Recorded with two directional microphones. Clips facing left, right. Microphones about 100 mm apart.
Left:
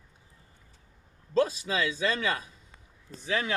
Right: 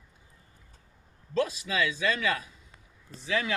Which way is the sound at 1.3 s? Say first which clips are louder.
Left 2 dB; 30° left (ahead or behind).